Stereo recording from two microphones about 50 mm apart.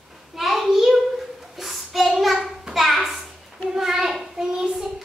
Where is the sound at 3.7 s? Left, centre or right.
Centre.